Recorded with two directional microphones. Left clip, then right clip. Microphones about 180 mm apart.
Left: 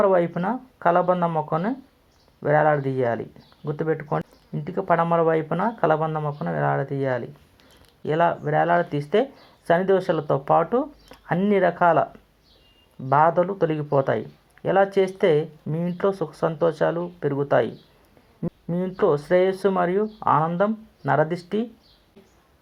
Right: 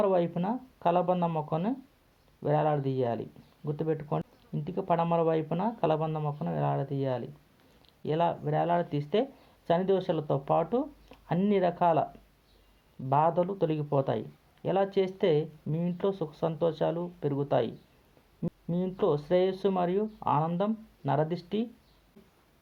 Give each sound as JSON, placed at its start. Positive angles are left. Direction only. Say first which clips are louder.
{"t": 0.0, "sound": "speech", "louder": "left 7 dB", "side_deg": 35}
{"t": 13.1, "sound": "speech", "louder": "left 8 dB", "side_deg": 35}